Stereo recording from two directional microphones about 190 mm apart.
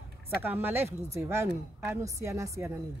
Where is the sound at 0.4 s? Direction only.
10° right (ahead or behind).